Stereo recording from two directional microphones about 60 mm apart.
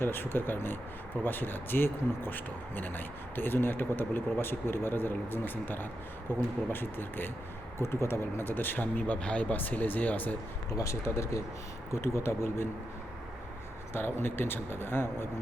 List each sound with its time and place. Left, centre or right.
0.0 s speech: left
9.1 s speech: centre
10.7 s speech: left
13.9 s speech: left